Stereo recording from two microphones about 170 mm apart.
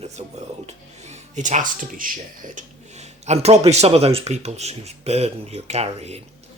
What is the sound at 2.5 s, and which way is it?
Speech, 40° right (ahead or behind).